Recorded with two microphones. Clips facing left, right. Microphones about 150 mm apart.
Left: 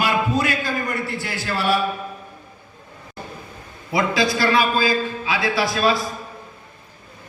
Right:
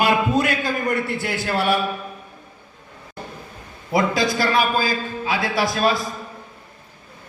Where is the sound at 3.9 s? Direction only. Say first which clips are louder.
Right 1 dB; 45° right (ahead or behind).